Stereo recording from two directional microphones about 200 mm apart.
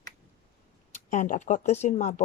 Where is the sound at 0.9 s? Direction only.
35° left (ahead or behind).